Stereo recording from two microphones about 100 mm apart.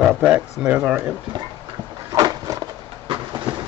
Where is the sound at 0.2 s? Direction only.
10° right (ahead or behind).